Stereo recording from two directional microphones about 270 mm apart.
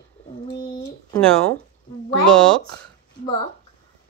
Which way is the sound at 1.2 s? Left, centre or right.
Centre.